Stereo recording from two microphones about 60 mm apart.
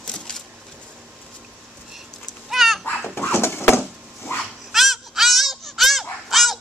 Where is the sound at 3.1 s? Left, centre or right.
Left.